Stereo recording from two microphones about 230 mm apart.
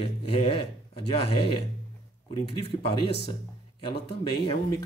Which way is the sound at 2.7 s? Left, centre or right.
Left.